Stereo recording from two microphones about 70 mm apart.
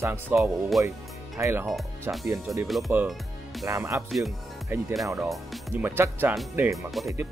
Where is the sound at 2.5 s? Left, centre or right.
Centre.